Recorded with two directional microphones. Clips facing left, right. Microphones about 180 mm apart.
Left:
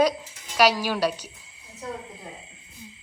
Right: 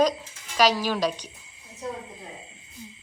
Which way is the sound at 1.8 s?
20° right (ahead or behind).